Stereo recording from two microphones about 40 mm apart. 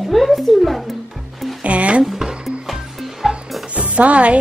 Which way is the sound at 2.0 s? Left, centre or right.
Centre.